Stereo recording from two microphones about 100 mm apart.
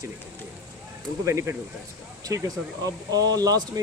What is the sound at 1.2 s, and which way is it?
Speech, 30° right (ahead or behind).